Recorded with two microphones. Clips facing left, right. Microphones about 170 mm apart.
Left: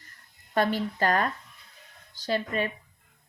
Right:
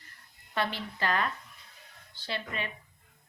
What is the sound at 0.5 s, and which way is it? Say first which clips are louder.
Speech: left 7 dB; 45° left (ahead or behind).